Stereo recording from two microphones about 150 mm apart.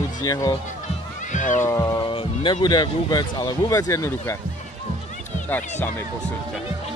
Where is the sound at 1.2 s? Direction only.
55° left (ahead or behind).